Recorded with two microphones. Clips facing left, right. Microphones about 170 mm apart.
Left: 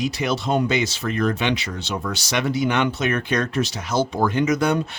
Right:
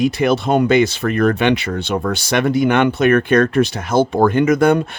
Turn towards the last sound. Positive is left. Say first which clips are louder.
# right 7 dB
turn(degrees=-55)  # may be behind; listen again after turning